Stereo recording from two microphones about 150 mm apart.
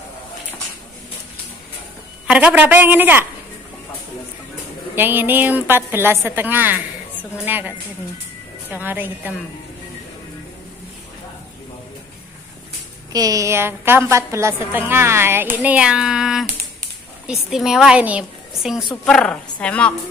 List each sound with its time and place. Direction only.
2.2 s a woman's voice: 10° right (ahead or behind)
4.9 s a woman's voice: 15° right (ahead or behind)
8.7 s a woman's voice: 15° right (ahead or behind)
13.1 s a woman's voice: 25° right (ahead or behind); by 19.9 s 10° left (ahead or behind)